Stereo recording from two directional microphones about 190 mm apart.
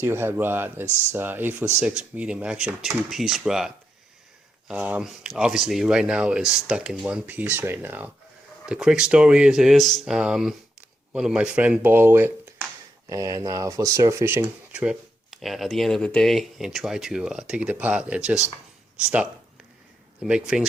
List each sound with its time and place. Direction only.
0.0 s speech: 10° right (ahead or behind)
4.7 s speech: 5° right (ahead or behind)
20.2 s speech: 5° right (ahead or behind)